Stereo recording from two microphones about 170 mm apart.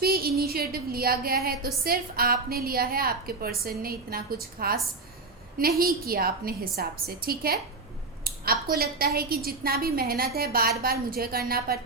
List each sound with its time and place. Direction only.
0.0 s a woman's voice: 65° right (ahead or behind)
8.3 s a sound: 65° right (ahead or behind)
8.7 s a woman's voice: 65° right (ahead or behind)